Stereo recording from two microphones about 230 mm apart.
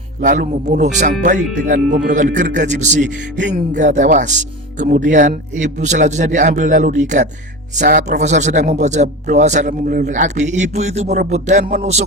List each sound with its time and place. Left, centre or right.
0.2 s a man's voice: right